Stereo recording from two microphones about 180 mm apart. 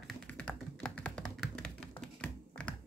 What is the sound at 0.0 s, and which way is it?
Tap, 5° left (ahead or behind).